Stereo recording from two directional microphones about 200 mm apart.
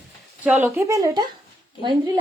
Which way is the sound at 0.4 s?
10° right (ahead or behind).